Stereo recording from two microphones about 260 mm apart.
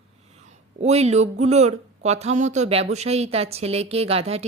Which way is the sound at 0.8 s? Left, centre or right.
Right.